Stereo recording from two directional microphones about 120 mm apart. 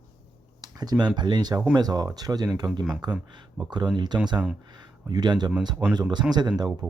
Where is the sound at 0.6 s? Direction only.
35° right (ahead or behind).